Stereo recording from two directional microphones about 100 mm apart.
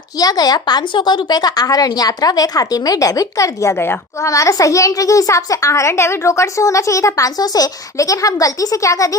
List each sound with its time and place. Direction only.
0.2 s a woman's voice: 40° left (ahead or behind)